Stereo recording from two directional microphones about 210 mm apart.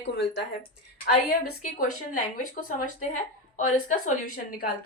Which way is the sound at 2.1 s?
40° left (ahead or behind).